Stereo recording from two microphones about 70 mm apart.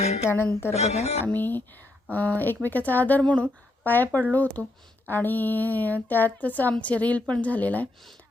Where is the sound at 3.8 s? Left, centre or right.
Left.